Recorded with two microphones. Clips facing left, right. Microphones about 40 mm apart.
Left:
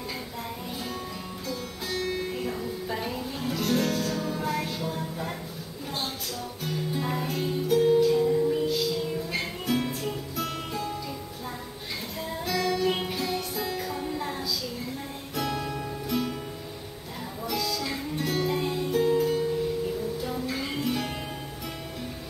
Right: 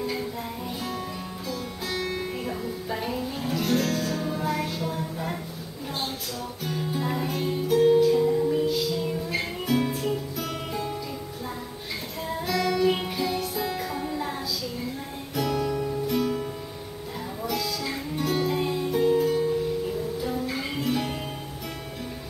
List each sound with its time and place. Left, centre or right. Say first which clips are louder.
1.9 s music: even; centre
6.6 s music: right 1 dB; centre
12.4 s music: right 3 dB; centre
15.3 s music: right 4 dB; centre
17.5 s music: even; centre